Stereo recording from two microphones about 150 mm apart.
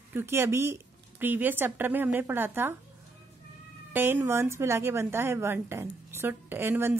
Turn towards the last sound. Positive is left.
turn(degrees=-15)  # may be behind; listen again after turning